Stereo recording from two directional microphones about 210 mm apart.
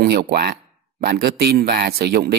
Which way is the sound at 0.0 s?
45° right (ahead or behind).